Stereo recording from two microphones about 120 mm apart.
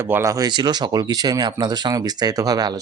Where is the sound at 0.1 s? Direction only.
25° right (ahead or behind).